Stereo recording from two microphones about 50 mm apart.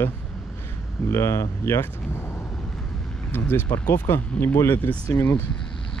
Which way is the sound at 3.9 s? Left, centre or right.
Left.